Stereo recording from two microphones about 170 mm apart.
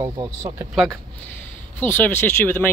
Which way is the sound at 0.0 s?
25° right (ahead or behind).